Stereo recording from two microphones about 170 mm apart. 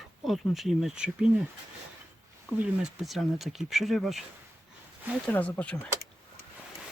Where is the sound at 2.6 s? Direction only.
Centre (ahead or behind).